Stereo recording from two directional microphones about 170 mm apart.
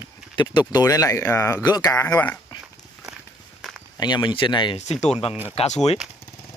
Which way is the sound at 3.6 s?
Centre (ahead or behind).